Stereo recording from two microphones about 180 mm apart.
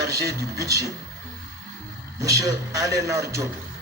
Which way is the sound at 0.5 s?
20° right (ahead or behind).